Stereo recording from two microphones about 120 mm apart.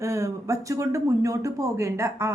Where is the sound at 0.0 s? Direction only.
25° right (ahead or behind).